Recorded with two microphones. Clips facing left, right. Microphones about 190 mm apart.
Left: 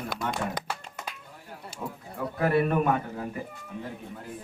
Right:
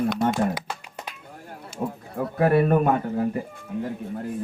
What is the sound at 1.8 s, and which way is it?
A man's voice, 35° right (ahead or behind).